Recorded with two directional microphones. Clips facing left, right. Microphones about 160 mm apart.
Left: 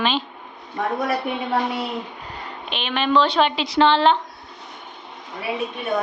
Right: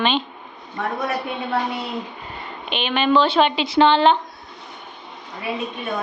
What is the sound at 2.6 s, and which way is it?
Speech, centre (ahead or behind).